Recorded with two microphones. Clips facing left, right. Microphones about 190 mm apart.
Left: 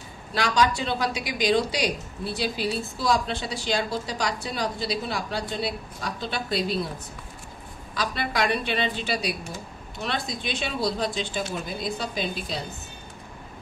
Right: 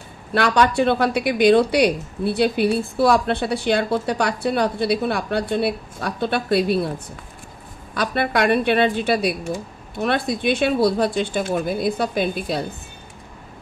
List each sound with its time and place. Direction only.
0.3 s a woman's voice: 60° right (ahead or behind)
7.9 s a woman's voice: 60° right (ahead or behind)